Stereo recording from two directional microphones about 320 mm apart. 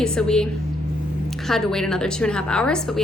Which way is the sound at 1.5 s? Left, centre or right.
Centre.